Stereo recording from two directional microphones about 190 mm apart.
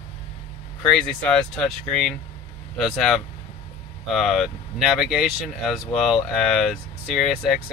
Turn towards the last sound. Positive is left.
turn(degrees=0)  # may be behind; listen again after turning